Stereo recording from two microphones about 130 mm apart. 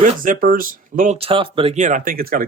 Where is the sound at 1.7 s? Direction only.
70° right (ahead or behind); by 2.5 s 90° right.